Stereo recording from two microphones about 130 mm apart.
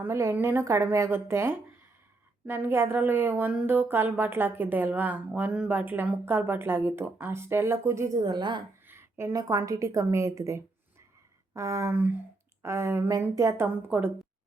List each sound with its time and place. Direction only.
0.0 s a woman's voice: 20° right (ahead or behind)
8.9 s a woman's voice: 20° right (ahead or behind)